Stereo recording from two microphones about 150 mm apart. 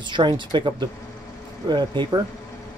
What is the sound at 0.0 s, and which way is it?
Speech, 30° right (ahead or behind).